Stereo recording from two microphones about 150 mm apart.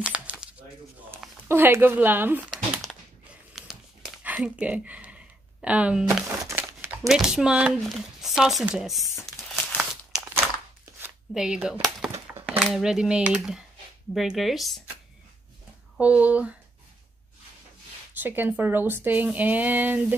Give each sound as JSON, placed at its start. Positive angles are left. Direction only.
{"t": 0.0, "sound": "crumpling", "side_deg": -5}
{"t": 1.5, "sound": "speech", "side_deg": -15}
{"t": 3.5, "sound": "a sound", "side_deg": -5}
{"t": 6.2, "sound": "music", "side_deg": -15}
{"t": 7.1, "sound": "speech", "side_deg": 0}
{"t": 9.2, "sound": "a sound", "side_deg": 0}
{"t": 9.8, "sound": "crumpling", "side_deg": -10}
{"t": 11.0, "sound": "a sound", "side_deg": -5}
{"t": 12.7, "sound": "speech", "side_deg": -5}
{"t": 16.0, "sound": "speech", "side_deg": -10}
{"t": 18.2, "sound": "speech", "side_deg": -15}